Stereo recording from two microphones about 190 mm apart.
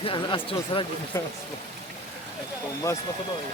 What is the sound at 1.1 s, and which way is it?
Speech, 15° left (ahead or behind).